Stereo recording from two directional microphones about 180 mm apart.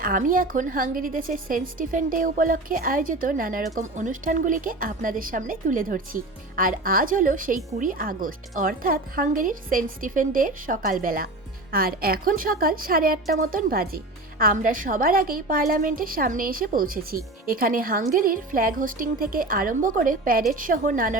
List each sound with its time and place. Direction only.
0.0 s a woman's voice: 50° right (ahead or behind)